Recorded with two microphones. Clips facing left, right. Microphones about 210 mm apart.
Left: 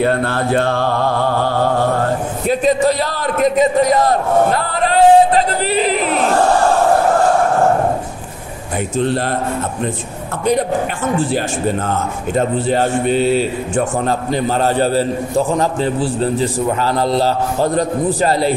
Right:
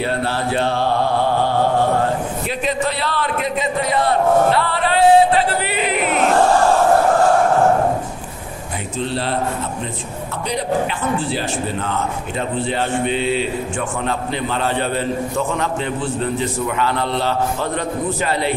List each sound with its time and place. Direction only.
0.0 s music: 50° left (ahead or behind)
2.4 s a sound: 40° left (ahead or behind)
8.9 s a man's voice: 50° left (ahead or behind)
11.1 s a man's voice: 45° left (ahead or behind)